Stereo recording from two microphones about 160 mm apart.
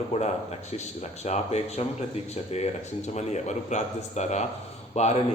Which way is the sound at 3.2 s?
45° left (ahead or behind).